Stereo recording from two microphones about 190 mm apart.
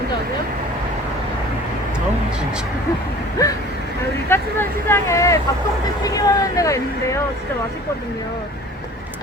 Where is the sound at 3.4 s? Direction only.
20° left (ahead or behind).